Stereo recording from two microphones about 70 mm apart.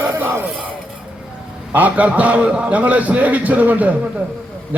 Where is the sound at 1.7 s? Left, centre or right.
Right.